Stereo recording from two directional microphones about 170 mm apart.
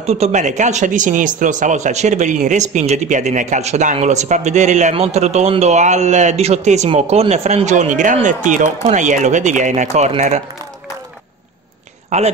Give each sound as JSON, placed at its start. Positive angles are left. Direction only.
{"t": 0.0, "sound": "speech", "side_deg": -40}
{"t": 12.1, "sound": "speech", "side_deg": -45}